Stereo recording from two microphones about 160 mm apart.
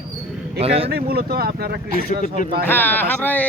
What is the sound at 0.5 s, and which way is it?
Speech, 40° right (ahead or behind).